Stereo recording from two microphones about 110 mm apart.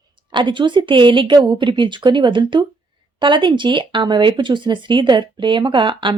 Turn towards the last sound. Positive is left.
turn(degrees=-45)  # may be behind; listen again after turning